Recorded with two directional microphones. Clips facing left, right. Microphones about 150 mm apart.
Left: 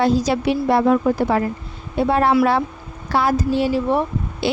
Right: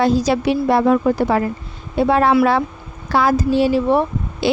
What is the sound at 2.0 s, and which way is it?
Speech, 90° right.